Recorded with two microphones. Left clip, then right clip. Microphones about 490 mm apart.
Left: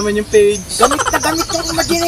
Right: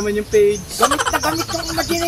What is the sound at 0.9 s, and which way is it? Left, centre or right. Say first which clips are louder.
Frog: left 3 dB; centre.